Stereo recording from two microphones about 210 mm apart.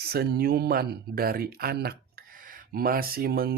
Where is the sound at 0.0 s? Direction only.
50° right (ahead or behind).